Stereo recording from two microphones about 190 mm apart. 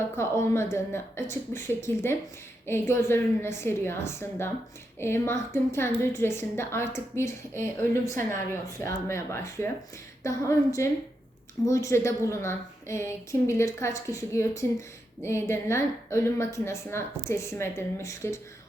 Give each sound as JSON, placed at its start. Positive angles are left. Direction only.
{"t": 0.2, "sound": "a woman's voice", "side_deg": 15}
{"t": 8.8, "sound": "a woman's voice", "side_deg": 15}